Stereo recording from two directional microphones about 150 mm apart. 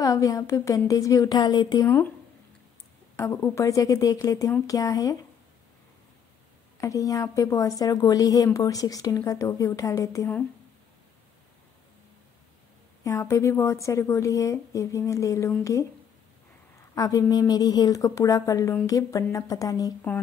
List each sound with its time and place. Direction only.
0.0 s a woman's voice: 25° left (ahead or behind)
3.2 s a woman's voice: 20° left (ahead or behind)
6.8 s a woman's voice: 20° left (ahead or behind)
13.0 s a woman's voice: 20° left (ahead or behind)
16.9 s a woman's voice: 25° left (ahead or behind)